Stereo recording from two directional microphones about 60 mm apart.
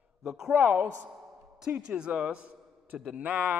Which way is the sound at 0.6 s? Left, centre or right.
Right.